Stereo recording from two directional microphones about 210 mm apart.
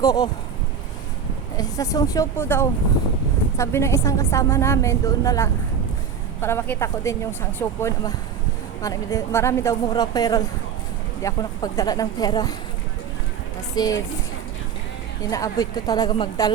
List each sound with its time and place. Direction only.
0.0 s a woman's voice: 20° left (ahead or behind)
1.5 s a woman's voice: 15° left (ahead or behind)
13.7 s a woman's voice: 15° left (ahead or behind)
15.2 s a woman's voice: 15° left (ahead or behind)